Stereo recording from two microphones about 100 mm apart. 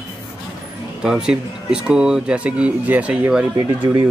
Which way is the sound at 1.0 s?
10° right (ahead or behind).